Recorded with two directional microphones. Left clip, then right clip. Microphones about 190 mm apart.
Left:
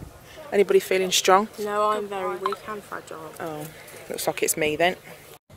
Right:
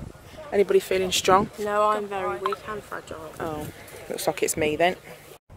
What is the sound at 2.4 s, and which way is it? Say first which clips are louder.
Speech: even; 40° left (ahead or behind).